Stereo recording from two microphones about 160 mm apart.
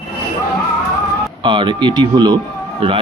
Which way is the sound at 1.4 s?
30° right (ahead or behind).